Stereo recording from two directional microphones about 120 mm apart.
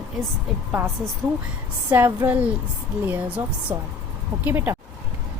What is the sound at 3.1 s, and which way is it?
A woman's voice, 15° right (ahead or behind).